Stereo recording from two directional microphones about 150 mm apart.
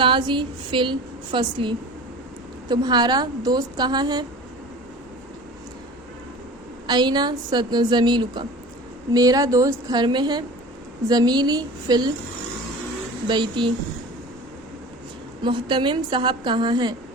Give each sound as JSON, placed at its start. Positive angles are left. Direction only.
{"t": 0.0, "sound": "a woman's voice", "side_deg": -30}
{"t": 6.8, "sound": "a woman's voice", "side_deg": -30}
{"t": 13.2, "sound": "a woman's voice", "side_deg": -30}
{"t": 15.4, "sound": "a woman's voice", "side_deg": -35}